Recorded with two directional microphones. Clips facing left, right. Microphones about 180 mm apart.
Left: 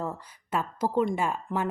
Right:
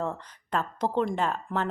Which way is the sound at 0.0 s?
10° left (ahead or behind).